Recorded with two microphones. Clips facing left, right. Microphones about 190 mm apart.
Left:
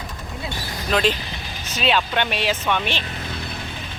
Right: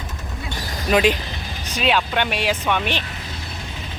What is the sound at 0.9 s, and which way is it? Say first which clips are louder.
Speech: right 3 dB; 10° right (ahead or behind).